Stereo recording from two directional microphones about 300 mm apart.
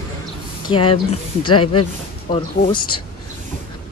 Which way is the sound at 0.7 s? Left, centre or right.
Centre.